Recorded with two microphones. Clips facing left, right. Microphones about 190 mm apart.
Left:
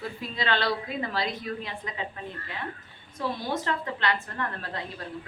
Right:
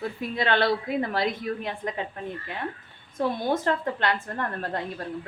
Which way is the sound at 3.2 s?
50° right (ahead or behind).